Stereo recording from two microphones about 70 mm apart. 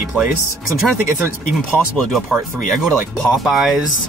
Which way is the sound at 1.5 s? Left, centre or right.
Centre.